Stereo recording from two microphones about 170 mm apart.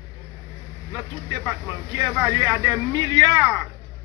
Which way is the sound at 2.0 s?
15° right (ahead or behind).